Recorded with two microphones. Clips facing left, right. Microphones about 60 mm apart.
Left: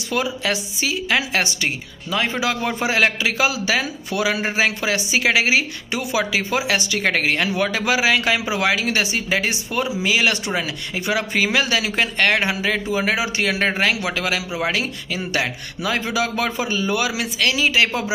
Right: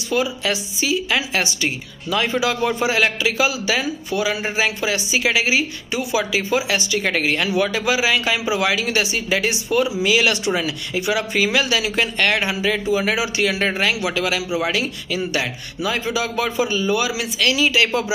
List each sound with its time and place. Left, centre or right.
0.1 s a man's voice: left
2.0 s a man's voice: left
2.4 s speech: left
4.1 s speech: left
4.4 s a man's voice: left